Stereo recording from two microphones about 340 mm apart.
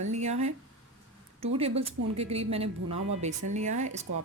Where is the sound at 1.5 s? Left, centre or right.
Centre.